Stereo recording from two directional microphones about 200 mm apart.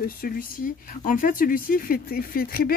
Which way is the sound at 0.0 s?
50° left (ahead or behind).